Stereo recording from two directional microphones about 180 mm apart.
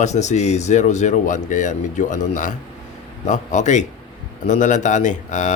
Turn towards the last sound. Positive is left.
turn(degrees=45)  # may be behind; listen again after turning